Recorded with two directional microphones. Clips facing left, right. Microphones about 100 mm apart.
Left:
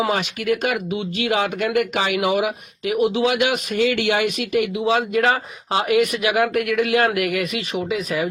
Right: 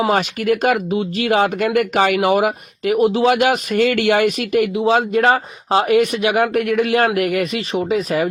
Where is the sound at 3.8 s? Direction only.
55° right (ahead or behind).